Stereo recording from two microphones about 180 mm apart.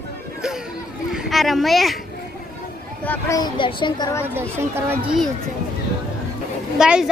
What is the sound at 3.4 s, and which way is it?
Speech, 25° left (ahead or behind).